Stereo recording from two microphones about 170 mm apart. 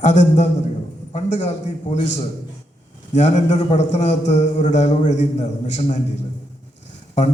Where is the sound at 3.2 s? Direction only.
45° left (ahead or behind).